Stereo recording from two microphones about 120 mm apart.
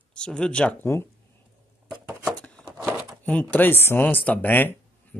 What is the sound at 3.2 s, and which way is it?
Speech, 10° left (ahead or behind).